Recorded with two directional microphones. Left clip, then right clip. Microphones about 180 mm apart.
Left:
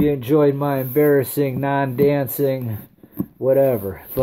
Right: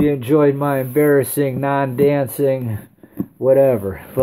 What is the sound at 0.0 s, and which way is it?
Speech, centre (ahead or behind).